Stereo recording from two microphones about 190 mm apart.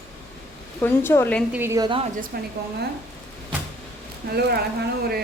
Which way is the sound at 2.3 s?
50° right (ahead or behind).